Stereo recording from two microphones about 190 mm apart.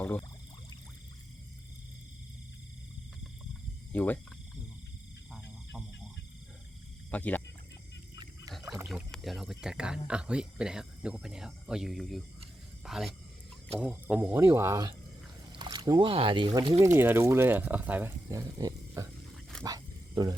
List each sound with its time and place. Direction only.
0.0 s speech: 5° left (ahead or behind)
3.9 s speech: 10° left (ahead or behind)
7.1 s speech: 10° left (ahead or behind)
8.1 s wild animals: 20° right (ahead or behind)
8.9 s speech: centre (ahead or behind); by 19.1 s 20° right (ahead or behind)
19.6 s dog: 20° right (ahead or behind)